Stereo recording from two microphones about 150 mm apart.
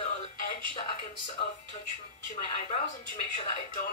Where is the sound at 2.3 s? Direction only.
55° left (ahead or behind).